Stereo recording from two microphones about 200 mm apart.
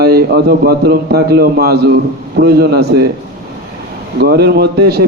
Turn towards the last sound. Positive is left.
turn(degrees=-50)  # may be behind; listen again after turning